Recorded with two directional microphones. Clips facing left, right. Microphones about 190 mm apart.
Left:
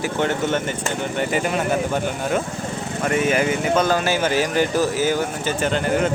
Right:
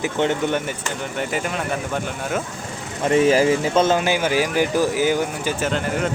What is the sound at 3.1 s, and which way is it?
Speech, 30° right (ahead or behind).